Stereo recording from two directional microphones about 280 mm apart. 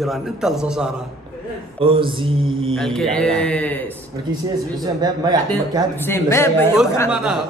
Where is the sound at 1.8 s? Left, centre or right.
Centre.